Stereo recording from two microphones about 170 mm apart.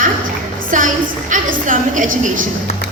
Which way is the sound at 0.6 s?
50° right (ahead or behind).